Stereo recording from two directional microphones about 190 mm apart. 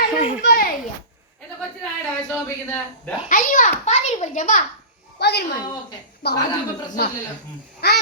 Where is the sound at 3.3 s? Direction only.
45° left (ahead or behind).